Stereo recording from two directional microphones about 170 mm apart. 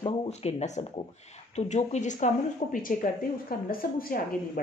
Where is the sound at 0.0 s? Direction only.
35° left (ahead or behind).